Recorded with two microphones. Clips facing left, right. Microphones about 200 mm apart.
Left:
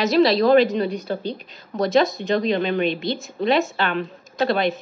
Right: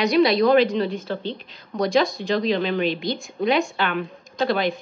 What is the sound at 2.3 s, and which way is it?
Speech, 50° left (ahead or behind).